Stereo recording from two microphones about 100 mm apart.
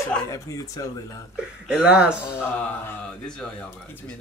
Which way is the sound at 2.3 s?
20° left (ahead or behind).